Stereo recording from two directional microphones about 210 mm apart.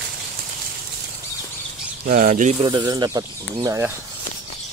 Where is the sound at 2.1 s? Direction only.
40° right (ahead or behind).